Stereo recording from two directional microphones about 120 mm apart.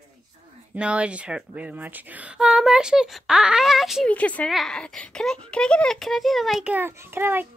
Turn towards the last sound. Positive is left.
turn(degrees=-20)  # may be behind; listen again after turning